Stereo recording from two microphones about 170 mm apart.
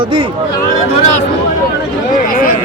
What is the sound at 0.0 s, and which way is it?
Speech, 30° right (ahead or behind).